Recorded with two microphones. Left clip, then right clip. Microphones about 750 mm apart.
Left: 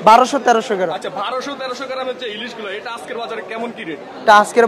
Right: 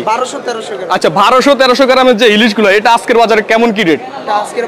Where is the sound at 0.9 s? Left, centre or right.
Right.